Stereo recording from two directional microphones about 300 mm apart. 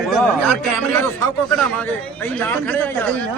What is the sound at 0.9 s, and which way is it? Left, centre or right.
A man's voice, centre.